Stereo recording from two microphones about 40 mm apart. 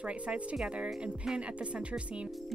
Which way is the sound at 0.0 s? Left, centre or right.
Right.